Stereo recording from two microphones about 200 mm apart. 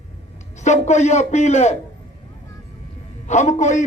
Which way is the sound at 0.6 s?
35° left (ahead or behind).